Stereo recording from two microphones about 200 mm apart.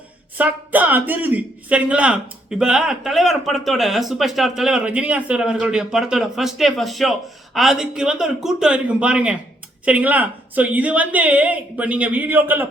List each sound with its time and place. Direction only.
0.3 s a woman's voice: 10° right (ahead or behind)